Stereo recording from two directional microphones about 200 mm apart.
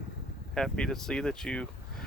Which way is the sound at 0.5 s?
5° left (ahead or behind).